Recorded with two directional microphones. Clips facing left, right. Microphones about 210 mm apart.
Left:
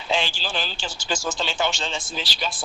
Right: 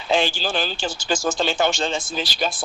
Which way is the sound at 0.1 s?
50° right (ahead or behind).